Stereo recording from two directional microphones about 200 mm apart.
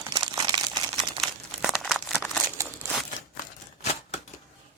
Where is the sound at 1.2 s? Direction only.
Centre (ahead or behind).